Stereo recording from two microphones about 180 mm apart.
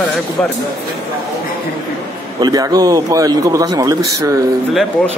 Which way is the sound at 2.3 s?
20° right (ahead or behind).